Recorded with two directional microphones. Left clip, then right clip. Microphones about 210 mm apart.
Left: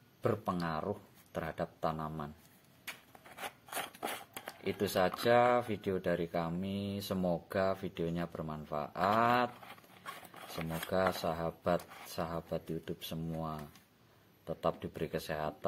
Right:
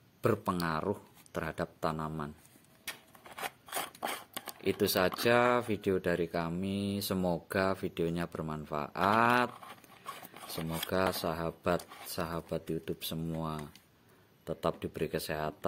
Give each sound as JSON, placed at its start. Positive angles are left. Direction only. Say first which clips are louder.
{"t": 0.2, "sound": "speech", "louder": "right 3 dB", "side_deg": -30}
{"t": 4.6, "sound": "speech", "louder": "right 3 dB", "side_deg": -25}
{"t": 10.7, "sound": "speech", "louder": "right 1 dB", "side_deg": -25}